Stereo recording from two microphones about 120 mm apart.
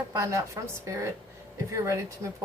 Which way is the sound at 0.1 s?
25° right (ahead or behind).